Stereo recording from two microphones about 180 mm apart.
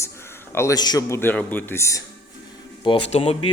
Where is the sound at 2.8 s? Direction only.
30° left (ahead or behind).